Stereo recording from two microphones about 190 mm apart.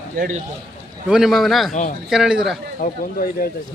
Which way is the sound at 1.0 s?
5° right (ahead or behind).